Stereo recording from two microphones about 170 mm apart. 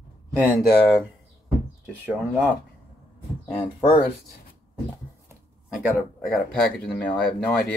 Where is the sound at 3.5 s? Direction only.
25° left (ahead or behind).